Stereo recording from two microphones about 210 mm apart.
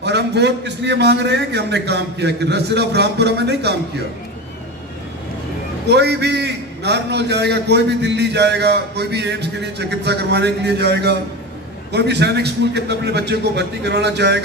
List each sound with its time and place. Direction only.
0.0 s a man's voice: 55° right (ahead or behind)
5.9 s a man's voice: 50° right (ahead or behind)